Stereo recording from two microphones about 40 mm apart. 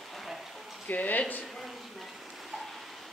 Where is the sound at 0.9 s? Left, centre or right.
Left.